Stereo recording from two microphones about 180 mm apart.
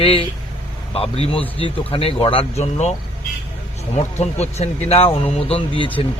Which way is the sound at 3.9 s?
35° left (ahead or behind).